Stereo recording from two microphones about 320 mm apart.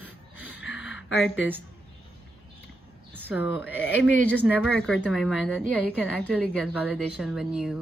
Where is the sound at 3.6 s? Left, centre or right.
Left.